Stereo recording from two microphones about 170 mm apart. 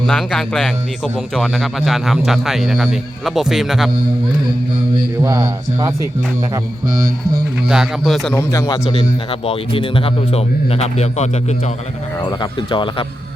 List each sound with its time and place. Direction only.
0.0 s speech: centre (ahead or behind)
5.2 s speech: 15° right (ahead or behind)
7.7 s speech: centre (ahead or behind)
8.4 s speech: 20° left (ahead or behind)
8.9 s a man's voice: 35° left (ahead or behind)
12.2 s speech: 25° left (ahead or behind)